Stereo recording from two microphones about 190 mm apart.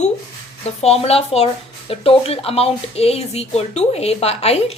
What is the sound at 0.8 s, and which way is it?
A woman's voice, 35° left (ahead or behind).